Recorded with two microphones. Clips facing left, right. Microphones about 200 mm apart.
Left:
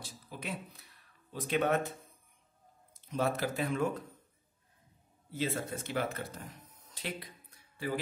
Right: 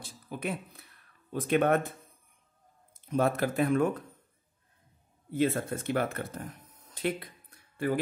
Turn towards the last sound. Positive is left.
turn(degrees=-55)  # may be behind; listen again after turning